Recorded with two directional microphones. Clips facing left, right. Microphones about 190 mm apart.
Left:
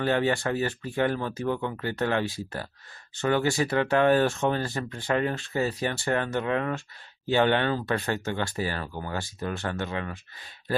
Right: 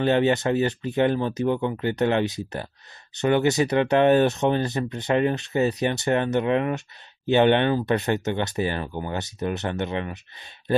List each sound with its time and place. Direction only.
0.0 s speech: 20° right (ahead or behind)